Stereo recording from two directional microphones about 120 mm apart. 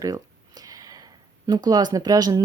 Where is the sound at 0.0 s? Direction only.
30° right (ahead or behind).